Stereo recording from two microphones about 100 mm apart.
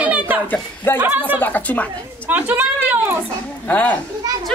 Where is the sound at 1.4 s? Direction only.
15° left (ahead or behind).